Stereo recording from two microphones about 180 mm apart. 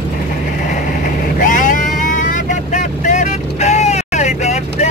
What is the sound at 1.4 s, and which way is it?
Vehicle, 45° left (ahead or behind).